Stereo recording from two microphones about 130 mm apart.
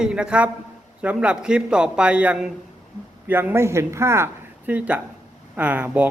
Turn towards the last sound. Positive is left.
turn(degrees=-10)  # may be behind; listen again after turning